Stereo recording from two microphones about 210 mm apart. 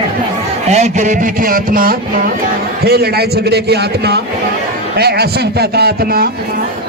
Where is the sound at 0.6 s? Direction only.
35° right (ahead or behind).